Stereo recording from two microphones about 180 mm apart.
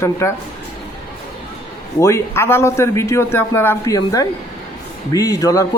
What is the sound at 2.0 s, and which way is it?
A man's voice, 15° left (ahead or behind).